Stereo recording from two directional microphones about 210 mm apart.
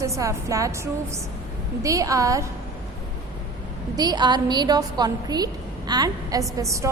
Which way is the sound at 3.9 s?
20° right (ahead or behind).